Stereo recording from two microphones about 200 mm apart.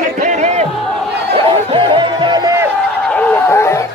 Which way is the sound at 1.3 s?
25° right (ahead or behind).